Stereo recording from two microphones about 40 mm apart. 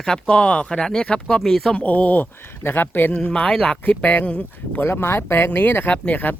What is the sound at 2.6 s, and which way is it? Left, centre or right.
Speech, left.